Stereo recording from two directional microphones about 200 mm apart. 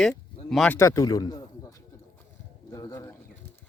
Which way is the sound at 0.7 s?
15° left (ahead or behind).